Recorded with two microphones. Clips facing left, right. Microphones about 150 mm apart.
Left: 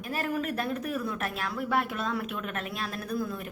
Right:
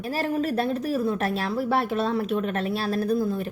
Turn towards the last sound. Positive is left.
turn(degrees=-30)  # may be behind; listen again after turning